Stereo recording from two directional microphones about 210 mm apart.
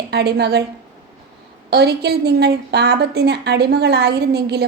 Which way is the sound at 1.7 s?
50° right (ahead or behind).